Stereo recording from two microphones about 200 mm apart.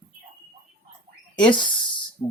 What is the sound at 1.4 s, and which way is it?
Speech, 25° left (ahead or behind).